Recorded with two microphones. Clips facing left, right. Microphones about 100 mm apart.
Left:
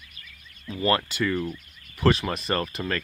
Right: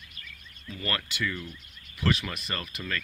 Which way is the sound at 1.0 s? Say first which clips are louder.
Left 7 dB; 40° left (ahead or behind).